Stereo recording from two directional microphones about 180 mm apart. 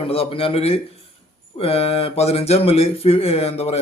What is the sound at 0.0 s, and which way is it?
Speech, 30° left (ahead or behind).